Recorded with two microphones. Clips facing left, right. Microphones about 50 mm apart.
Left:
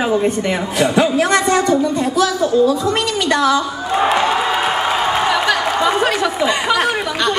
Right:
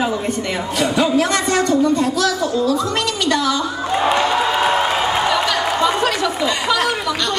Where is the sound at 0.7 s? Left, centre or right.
Centre.